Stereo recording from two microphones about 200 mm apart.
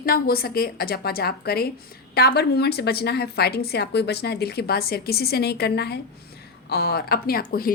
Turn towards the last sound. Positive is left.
turn(degrees=50)  # may be behind; listen again after turning